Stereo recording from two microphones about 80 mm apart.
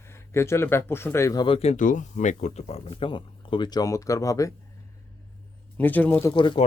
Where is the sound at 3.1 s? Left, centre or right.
Left.